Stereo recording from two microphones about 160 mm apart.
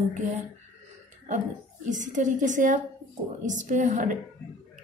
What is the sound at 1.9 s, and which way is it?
A woman's voice, 55° right (ahead or behind).